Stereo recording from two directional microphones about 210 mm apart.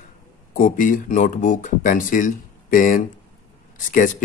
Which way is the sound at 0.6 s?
40° left (ahead or behind).